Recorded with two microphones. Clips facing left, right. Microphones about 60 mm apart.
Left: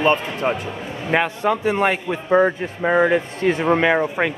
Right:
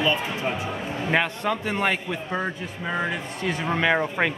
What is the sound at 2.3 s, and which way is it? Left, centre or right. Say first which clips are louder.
A man's voice: left 15 dB; left.